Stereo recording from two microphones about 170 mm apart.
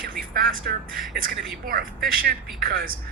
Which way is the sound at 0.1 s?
55° right (ahead or behind).